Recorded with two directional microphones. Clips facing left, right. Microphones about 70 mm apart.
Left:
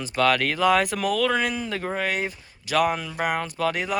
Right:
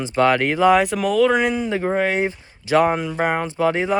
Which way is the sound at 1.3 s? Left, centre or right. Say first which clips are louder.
Right 6 dB; centre.